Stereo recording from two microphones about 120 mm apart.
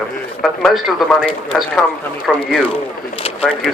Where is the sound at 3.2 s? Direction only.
50° left (ahead or behind).